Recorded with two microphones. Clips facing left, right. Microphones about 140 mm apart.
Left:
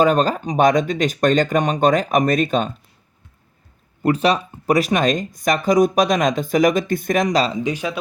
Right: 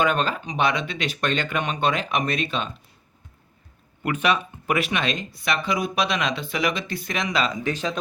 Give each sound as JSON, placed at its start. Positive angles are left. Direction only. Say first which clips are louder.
{"t": 0.0, "sound": "speech", "louder": "left 7 dB", "side_deg": 40}
{"t": 4.0, "sound": "speech", "louder": "left 6 dB", "side_deg": 35}
{"t": 7.5, "sound": "speech", "louder": "left 4 dB", "side_deg": 15}